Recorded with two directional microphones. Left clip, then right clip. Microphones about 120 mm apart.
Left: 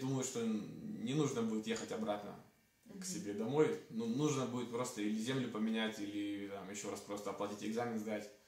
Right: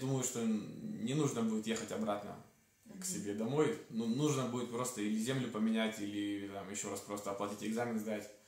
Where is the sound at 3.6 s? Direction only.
15° right (ahead or behind).